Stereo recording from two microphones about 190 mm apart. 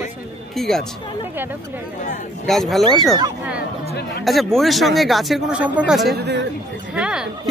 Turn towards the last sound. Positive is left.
turn(degrees=-5)  # may be behind; listen again after turning